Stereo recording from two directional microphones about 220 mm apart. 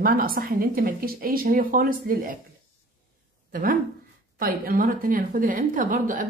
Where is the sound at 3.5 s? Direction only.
40° right (ahead or behind).